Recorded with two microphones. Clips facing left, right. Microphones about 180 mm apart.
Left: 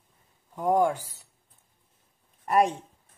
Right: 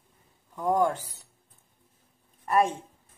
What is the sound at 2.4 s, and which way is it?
Speech, 20° left (ahead or behind).